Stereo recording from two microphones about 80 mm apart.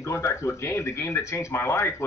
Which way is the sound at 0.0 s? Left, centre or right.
Left.